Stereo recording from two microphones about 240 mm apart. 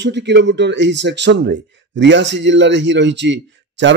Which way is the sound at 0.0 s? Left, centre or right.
Right.